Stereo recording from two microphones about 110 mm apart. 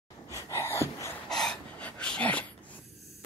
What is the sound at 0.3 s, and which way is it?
Gasp, 25° left (ahead or behind).